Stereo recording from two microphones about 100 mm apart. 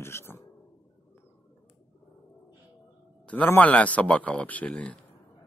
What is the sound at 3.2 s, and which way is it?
Speech, 15° left (ahead or behind).